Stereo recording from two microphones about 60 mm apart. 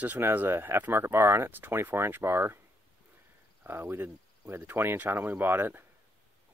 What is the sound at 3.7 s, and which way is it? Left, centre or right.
Speech, right.